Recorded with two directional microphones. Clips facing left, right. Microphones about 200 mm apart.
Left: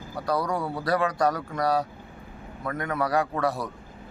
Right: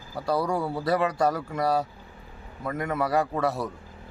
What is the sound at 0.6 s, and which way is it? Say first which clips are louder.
Speech: right 1 dB; centre (ahead or behind).